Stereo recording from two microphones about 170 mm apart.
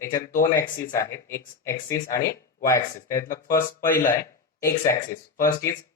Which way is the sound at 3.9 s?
50° left (ahead or behind).